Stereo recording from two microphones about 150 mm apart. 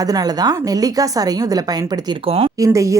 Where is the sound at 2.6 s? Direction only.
20° right (ahead or behind).